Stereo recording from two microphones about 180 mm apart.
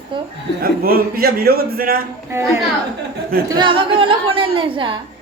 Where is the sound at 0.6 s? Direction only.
55° right (ahead or behind).